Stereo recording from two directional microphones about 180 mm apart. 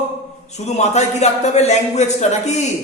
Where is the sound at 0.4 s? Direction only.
40° left (ahead or behind).